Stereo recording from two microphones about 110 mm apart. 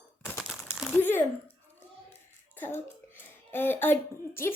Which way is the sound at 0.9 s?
20° left (ahead or behind).